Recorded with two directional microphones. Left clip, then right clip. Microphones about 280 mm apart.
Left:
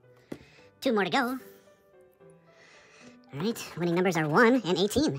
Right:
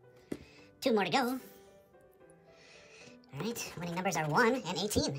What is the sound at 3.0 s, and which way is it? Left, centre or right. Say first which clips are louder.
Speech: left 6 dB; centre.